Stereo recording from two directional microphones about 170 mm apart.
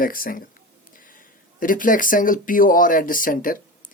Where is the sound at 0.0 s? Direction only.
55° left (ahead or behind).